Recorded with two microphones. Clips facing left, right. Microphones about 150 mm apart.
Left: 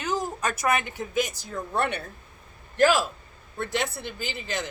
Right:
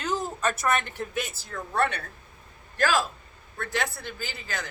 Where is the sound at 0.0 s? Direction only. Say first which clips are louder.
Even; 10° left (ahead or behind).